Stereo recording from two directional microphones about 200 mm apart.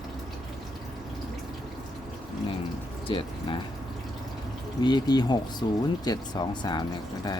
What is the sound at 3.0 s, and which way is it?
Speech, 25° left (ahead or behind).